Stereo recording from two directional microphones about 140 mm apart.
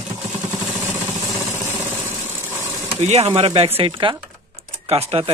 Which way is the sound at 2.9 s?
50° right (ahead or behind).